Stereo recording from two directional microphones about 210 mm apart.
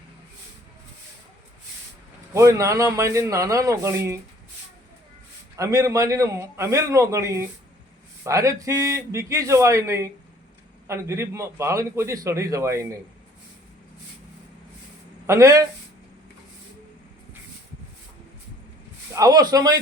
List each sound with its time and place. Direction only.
2.3 s a man's voice: 15° right (ahead or behind)
5.5 s a man's voice: 15° right (ahead or behind)
15.3 s a man's voice: 15° right (ahead or behind)
19.1 s a man's voice: 15° right (ahead or behind)